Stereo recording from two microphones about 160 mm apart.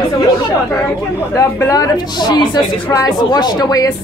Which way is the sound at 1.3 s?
20° left (ahead or behind).